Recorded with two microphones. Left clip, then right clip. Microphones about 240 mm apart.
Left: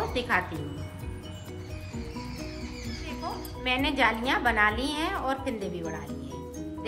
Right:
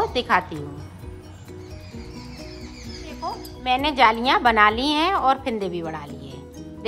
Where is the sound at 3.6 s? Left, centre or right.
Centre.